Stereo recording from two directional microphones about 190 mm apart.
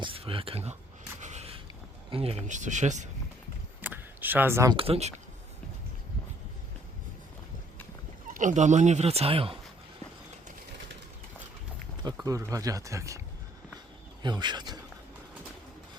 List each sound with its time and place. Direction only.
0.0 s speech: 30° right (ahead or behind)
1.2 s a sound: 35° right (ahead or behind)
2.0 s speech: 30° right (ahead or behind)
3.8 s a sound: 10° right (ahead or behind)
4.8 s speech: 35° right (ahead or behind)
8.3 s speech: 40° right (ahead or behind)
12.2 s speech: 20° right (ahead or behind)